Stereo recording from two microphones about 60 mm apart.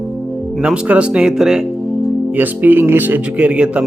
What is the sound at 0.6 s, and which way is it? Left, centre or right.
Speech, centre.